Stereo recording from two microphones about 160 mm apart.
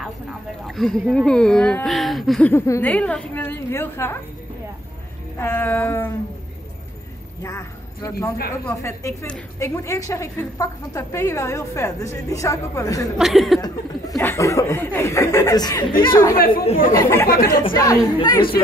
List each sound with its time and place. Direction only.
0.7 s speech: centre (ahead or behind)
2.5 s a woman's voice: 15° left (ahead or behind)
5.4 s a woman's voice: 15° left (ahead or behind)
7.4 s a woman's voice: 20° left (ahead or behind)
13.2 s speech: centre (ahead or behind)
13.6 s a woman's voice: 20° left (ahead or behind)
16.3 s speech: 65° left (ahead or behind)
16.9 s a woman's voice: 15° left (ahead or behind)